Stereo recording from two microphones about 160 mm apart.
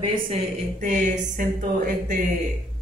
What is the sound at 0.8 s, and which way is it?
Speech, 50° right (ahead or behind).